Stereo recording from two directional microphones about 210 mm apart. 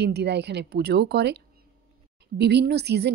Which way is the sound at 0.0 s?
55° right (ahead or behind).